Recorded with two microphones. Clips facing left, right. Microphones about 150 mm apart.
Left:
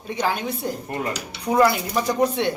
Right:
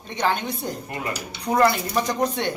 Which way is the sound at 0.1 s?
5° left (ahead or behind).